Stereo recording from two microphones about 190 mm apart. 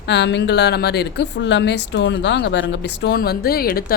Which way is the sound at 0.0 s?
65° left (ahead or behind).